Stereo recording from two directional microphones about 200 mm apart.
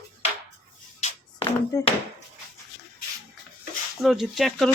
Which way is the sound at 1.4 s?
20° left (ahead or behind).